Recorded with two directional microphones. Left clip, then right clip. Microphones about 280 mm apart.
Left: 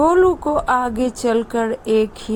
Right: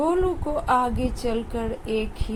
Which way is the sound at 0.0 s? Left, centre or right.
Left.